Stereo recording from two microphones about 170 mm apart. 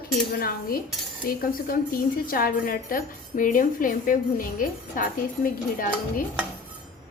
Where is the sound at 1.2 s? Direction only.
60° left (ahead or behind).